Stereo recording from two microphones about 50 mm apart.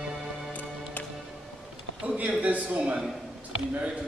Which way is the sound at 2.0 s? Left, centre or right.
Right.